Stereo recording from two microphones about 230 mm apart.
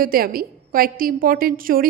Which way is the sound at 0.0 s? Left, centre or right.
Right.